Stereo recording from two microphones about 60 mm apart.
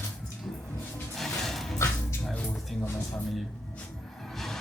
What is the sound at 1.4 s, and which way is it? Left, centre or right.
Music, centre.